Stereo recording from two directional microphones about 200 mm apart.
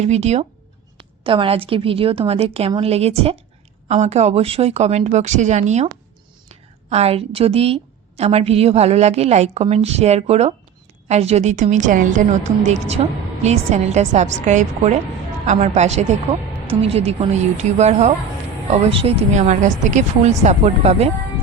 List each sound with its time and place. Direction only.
0.0 s a woman's voice: 35° right (ahead or behind)